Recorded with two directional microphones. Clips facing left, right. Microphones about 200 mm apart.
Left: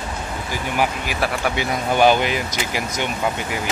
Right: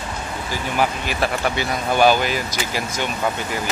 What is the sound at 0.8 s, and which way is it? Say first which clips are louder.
Speech: right 1 dB; 10° left (ahead or behind).